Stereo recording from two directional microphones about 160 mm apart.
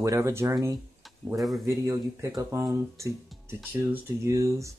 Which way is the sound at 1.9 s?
20° right (ahead or behind).